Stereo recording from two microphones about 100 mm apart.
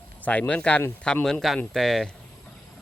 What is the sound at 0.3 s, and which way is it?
Speech, 10° left (ahead or behind).